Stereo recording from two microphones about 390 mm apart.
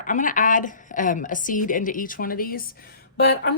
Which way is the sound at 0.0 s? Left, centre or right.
Centre.